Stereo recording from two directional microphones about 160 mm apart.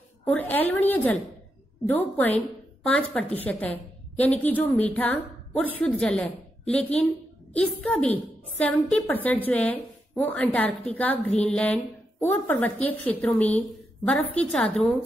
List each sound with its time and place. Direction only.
0.2 s a woman's voice: 10° left (ahead or behind)